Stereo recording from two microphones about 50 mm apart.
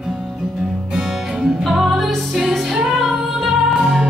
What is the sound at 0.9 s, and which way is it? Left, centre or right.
Music, centre.